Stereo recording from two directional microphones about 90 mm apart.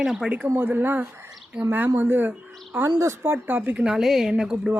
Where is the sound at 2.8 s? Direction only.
35° right (ahead or behind).